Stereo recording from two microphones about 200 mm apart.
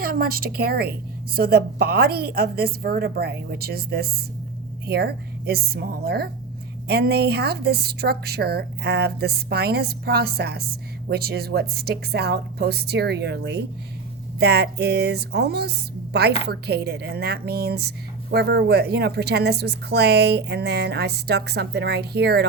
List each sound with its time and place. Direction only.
0.0 s a woman's voice: 45° right (ahead or behind)